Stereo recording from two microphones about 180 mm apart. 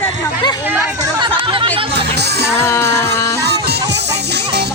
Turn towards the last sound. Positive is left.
turn(degrees=15)  # may be behind; listen again after turning